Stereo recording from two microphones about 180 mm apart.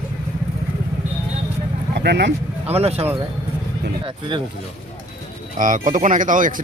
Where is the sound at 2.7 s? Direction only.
35° right (ahead or behind).